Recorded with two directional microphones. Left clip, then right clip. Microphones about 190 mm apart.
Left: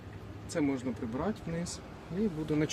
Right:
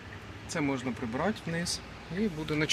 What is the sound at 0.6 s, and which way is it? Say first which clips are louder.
Speech: even; 25° right (ahead or behind).